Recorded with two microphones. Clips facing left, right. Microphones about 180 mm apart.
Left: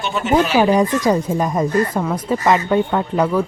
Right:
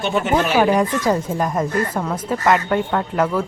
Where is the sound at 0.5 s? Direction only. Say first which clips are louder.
Left 2 dB; 20° left (ahead or behind).